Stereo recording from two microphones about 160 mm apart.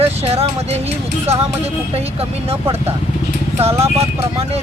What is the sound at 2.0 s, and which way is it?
Speech, 40° right (ahead or behind).